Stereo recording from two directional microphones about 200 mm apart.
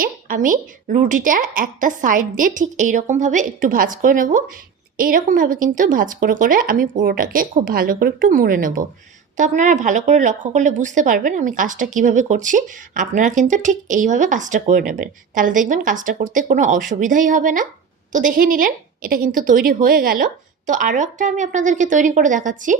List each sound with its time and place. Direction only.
0.0 s a woman's voice: 45° right (ahead or behind)